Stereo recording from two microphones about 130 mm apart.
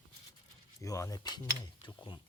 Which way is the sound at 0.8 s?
25° left (ahead or behind).